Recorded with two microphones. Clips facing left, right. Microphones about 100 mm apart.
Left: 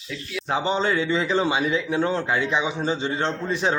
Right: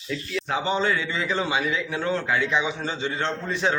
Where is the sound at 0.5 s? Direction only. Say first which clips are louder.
Left 2 dB; 25° left (ahead or behind).